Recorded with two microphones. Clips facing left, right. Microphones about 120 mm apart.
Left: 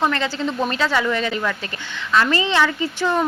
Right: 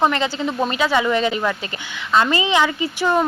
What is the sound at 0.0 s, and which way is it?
A woman's voice, 20° right (ahead or behind).